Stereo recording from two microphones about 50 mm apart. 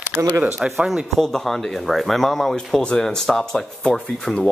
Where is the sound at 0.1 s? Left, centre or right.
Right.